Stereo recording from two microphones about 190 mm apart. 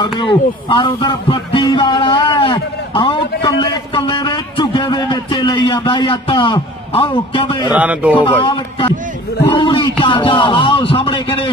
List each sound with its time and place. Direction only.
0.2 s a man's voice: 25° left (ahead or behind)
7.7 s speech: 5° right (ahead or behind)
8.2 s a man's voice: 25° left (ahead or behind)